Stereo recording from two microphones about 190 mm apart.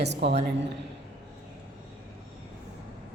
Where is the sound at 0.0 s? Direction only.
60° right (ahead or behind).